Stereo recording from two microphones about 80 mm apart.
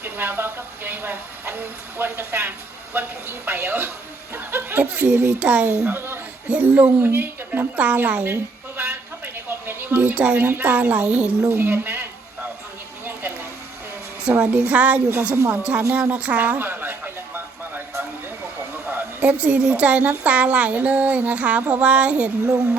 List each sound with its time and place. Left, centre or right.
0.0 s a woman's voice: right
5.8 s a woman's voice: right
8.8 s a sound: right
14.3 s a woman's voice: centre
15.4 s a sound: centre
18.7 s a woman's voice: right